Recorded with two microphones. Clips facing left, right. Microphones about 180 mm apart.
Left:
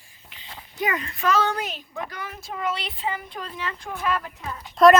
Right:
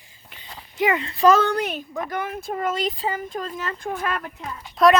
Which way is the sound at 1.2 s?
45° right (ahead or behind).